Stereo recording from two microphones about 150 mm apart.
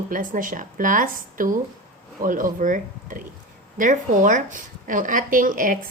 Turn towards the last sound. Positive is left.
turn(degrees=-65)  # may be behind; listen again after turning